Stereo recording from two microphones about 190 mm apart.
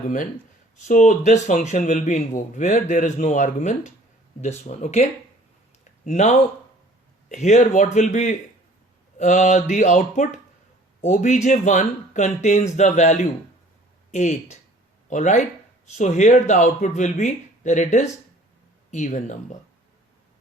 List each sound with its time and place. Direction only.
0.9 s a man's voice: 40° left (ahead or behind)
5.8 s a sound: 40° left (ahead or behind)
7.3 s a man's voice: 40° left (ahead or behind)